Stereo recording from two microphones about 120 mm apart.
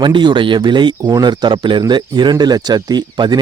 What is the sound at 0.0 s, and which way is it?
Speech, 40° right (ahead or behind).